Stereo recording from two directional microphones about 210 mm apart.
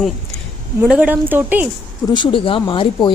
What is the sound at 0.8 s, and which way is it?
Speech, 5° right (ahead or behind).